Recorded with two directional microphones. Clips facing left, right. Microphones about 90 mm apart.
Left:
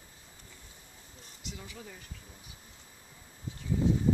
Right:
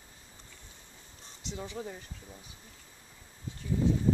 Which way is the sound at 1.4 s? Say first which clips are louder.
Right 7 dB; 30° right (ahead or behind).